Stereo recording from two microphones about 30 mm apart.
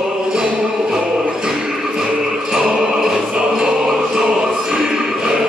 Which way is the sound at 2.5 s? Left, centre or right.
Right.